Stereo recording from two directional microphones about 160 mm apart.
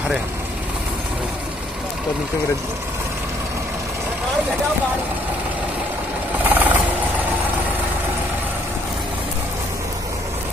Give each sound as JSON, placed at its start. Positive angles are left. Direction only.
{"t": 6.5, "sound": "vehicle", "side_deg": -10}